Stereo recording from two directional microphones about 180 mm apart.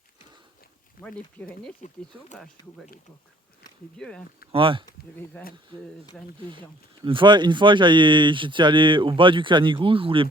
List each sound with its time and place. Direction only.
1.0 s speech: 10° left (ahead or behind)
3.9 s speech: 5° left (ahead or behind)
4.5 s speech: 30° right (ahead or behind)
5.4 s speech: 10° left (ahead or behind)
7.0 s speech: 25° right (ahead or behind)